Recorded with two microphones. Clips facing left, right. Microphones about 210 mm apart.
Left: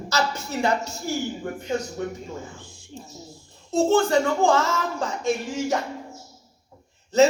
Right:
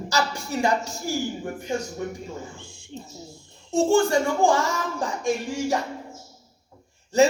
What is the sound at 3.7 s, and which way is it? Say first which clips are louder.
Speech: even; 15° right (ahead or behind).